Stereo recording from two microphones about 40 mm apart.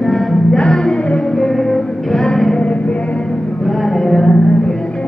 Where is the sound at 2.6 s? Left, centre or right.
Left.